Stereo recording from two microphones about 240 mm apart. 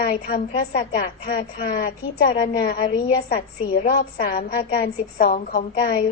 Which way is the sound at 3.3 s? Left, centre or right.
Left.